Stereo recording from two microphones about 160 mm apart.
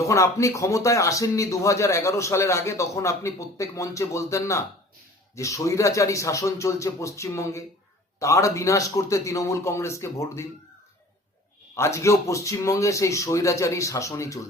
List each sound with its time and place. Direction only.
0.0 s speech: 20° left (ahead or behind)
11.7 s speech: 20° left (ahead or behind)